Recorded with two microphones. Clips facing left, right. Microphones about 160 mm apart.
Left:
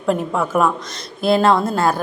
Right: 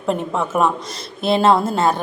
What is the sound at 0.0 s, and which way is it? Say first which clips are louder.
A woman's voice: left 2 dB; centre (ahead or behind).